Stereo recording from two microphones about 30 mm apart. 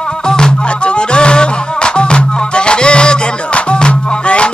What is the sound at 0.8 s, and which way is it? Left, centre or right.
Music, left.